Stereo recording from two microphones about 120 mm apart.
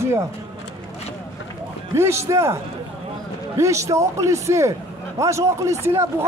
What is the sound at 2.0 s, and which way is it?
A man's voice, 20° right (ahead or behind).